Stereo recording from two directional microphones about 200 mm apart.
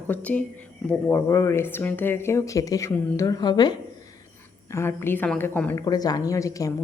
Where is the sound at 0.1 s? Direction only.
5° left (ahead or behind).